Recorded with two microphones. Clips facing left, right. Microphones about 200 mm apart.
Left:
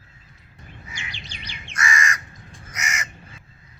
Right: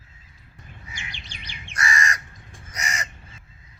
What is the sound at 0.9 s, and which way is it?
Chirp, 50° right (ahead or behind).